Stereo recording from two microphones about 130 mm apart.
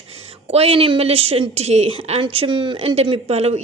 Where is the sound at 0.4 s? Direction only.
50° right (ahead or behind).